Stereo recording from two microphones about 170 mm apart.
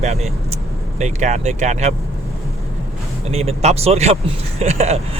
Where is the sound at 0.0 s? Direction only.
40° right (ahead or behind).